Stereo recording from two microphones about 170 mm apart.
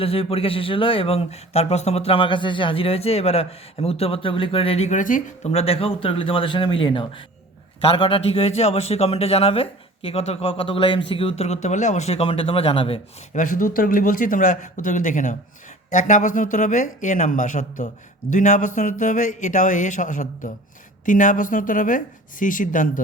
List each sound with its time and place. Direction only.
0.0 s speech: 35° left (ahead or behind)
13.3 s speech: 50° left (ahead or behind)